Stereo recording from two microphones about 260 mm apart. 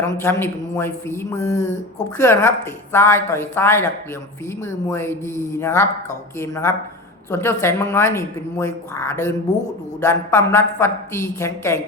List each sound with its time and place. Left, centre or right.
0.0 s speech: centre